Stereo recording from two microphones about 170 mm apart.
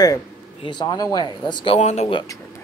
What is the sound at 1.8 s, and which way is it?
Speech, 40° left (ahead or behind).